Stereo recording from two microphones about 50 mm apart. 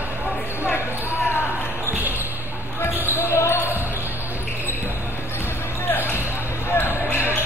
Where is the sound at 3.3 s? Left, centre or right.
Left.